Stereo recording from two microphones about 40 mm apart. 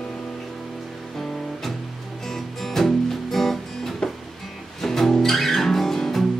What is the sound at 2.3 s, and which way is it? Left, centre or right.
Music, centre.